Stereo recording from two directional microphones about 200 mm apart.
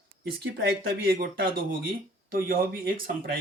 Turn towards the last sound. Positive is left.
turn(degrees=-45)  # may be behind; listen again after turning